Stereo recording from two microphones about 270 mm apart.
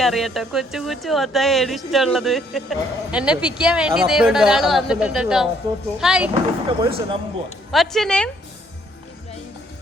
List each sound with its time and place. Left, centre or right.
0.0 s speech: centre
6.7 s speech: centre
7.7 s speech: centre